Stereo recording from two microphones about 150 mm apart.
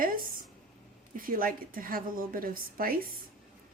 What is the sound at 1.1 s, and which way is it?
A woman's voice, 70° right (ahead or behind).